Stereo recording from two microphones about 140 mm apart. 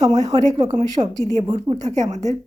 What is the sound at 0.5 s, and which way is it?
Speech, 55° right (ahead or behind).